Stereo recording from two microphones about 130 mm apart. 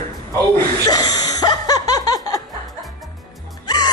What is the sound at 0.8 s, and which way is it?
Snicker, 30° left (ahead or behind).